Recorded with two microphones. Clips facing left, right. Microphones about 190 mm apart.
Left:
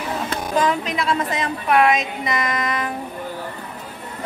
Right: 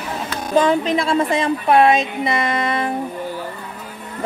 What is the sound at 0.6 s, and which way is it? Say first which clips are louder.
A woman's voice: right 6 dB; 30° right (ahead or behind).